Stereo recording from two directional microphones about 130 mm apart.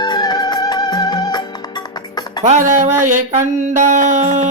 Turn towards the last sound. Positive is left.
turn(degrees=-65)  # may be behind; listen again after turning